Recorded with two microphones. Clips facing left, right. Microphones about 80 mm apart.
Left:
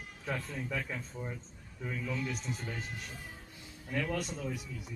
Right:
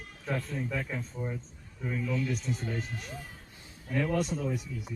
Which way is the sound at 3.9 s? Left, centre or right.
Centre.